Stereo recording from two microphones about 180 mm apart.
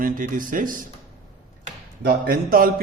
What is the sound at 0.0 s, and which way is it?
Speech, 50° right (ahead or behind).